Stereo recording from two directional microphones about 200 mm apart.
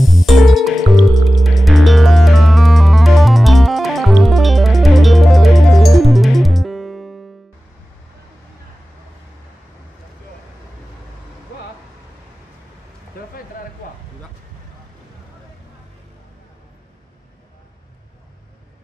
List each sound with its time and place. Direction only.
0.0 s music: centre (ahead or behind)